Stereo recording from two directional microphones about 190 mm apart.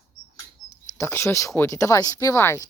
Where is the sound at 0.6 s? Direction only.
45° right (ahead or behind).